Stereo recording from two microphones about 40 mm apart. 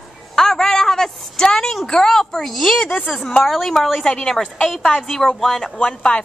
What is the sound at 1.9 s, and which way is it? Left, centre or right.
A woman's voice, centre.